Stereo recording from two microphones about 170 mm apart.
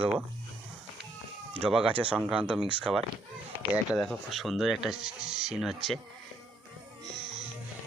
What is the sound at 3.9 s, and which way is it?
Speech, centre (ahead or behind).